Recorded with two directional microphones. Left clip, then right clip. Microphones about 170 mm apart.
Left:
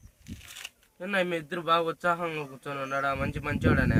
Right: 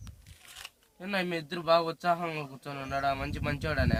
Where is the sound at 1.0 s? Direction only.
35° right (ahead or behind).